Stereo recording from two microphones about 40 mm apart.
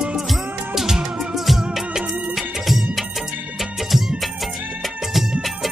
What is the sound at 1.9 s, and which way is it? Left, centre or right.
Music, centre.